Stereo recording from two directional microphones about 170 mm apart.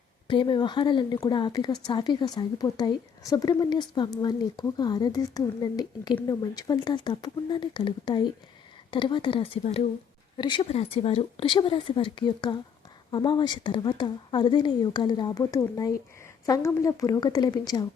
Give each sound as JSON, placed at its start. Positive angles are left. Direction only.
{"t": 0.3, "sound": "a woman's voice", "side_deg": 30}